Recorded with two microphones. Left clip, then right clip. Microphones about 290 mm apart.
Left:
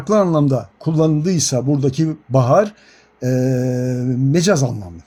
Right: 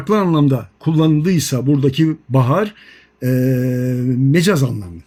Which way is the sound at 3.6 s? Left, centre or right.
Left.